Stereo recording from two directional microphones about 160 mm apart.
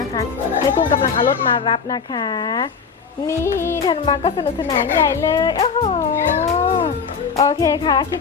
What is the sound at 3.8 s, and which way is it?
Music, 30° left (ahead or behind).